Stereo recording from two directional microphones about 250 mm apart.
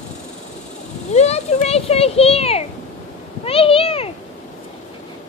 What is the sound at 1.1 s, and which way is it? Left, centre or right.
A child's voice, left.